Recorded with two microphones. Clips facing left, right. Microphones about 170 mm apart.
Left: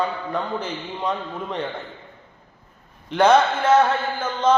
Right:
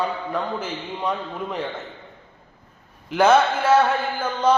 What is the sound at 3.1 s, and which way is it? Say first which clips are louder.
A man's voice: even; 5° right (ahead or behind).